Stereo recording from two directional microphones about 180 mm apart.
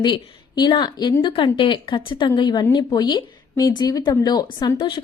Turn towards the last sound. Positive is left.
turn(degrees=25)  # may be behind; listen again after turning